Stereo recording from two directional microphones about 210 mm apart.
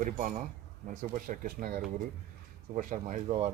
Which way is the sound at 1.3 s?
40° right (ahead or behind).